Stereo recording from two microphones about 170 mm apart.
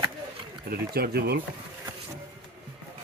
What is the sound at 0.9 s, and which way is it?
Speech, 70° right (ahead or behind).